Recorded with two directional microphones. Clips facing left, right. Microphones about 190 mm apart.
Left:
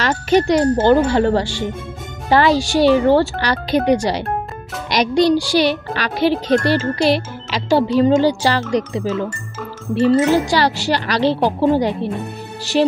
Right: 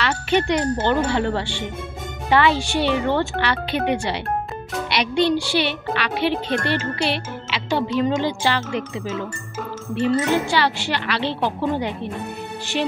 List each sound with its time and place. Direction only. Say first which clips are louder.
0.0 s speech: left 5 dB; 40° left (ahead or behind)